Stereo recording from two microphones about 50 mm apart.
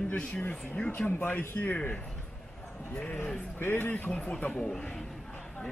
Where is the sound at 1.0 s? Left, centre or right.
Left.